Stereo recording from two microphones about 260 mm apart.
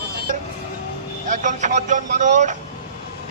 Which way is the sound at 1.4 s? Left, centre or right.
Right.